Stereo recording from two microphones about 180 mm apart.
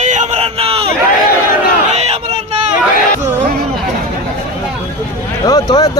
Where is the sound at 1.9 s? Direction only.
35° right (ahead or behind).